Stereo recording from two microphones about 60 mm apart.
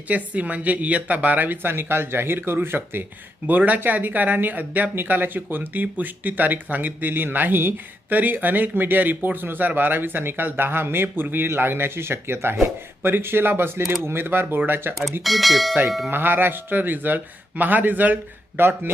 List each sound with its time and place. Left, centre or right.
0.1 s speech: right
15.2 s speech: centre
16.0 s speech: right